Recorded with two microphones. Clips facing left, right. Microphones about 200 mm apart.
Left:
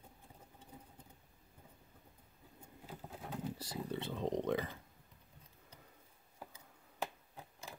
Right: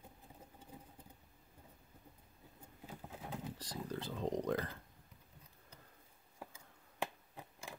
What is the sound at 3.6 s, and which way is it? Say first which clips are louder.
Speech: left 2 dB; 5° left (ahead or behind).